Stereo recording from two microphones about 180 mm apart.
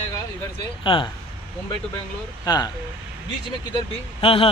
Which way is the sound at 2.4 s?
20° left (ahead or behind).